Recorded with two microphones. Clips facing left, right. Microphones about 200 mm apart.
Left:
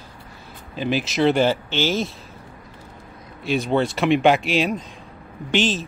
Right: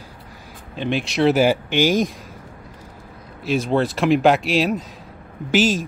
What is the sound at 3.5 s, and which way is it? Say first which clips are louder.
Speech: right 1 dB; centre (ahead or behind).